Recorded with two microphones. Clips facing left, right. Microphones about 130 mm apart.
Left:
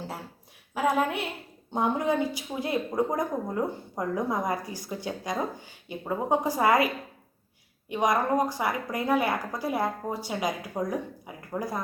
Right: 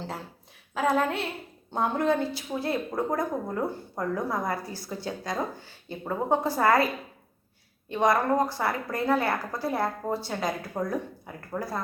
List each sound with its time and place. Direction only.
0.7 s a woman's voice: 10° left (ahead or behind)